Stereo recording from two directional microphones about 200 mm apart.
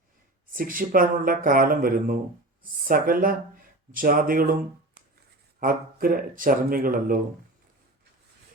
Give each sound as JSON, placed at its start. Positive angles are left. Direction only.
{"t": 0.5, "sound": "speech", "side_deg": -45}
{"t": 5.5, "sound": "speech", "side_deg": -45}